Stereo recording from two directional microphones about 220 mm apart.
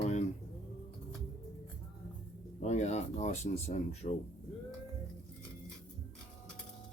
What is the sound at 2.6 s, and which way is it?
Speech, 30° left (ahead or behind).